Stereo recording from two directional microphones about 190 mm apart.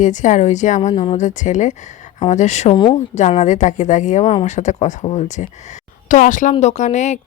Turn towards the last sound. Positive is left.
turn(degrees=40)  # may be behind; listen again after turning